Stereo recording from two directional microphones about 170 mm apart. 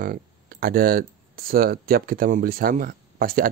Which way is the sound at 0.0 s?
60° right (ahead or behind).